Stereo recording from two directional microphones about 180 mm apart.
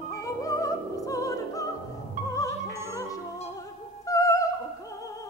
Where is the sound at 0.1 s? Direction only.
20° left (ahead or behind).